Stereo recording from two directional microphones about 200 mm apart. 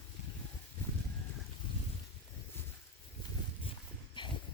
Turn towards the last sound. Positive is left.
turn(degrees=25)  # may be behind; listen again after turning